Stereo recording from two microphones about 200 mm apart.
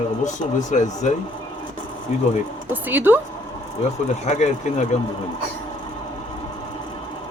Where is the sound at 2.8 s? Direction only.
10° right (ahead or behind).